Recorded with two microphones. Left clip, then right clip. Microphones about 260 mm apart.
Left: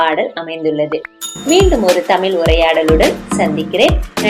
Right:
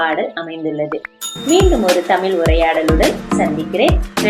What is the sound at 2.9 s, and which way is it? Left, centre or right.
Speech, centre.